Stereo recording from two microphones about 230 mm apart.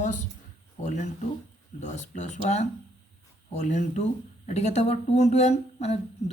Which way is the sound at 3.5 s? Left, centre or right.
Left.